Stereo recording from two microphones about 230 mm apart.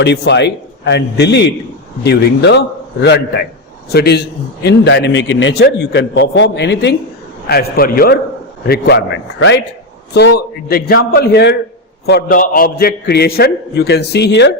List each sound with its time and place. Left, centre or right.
0.0 s a man's voice: left